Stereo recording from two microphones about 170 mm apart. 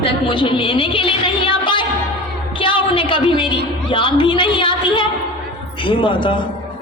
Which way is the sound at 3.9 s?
30° left (ahead or behind).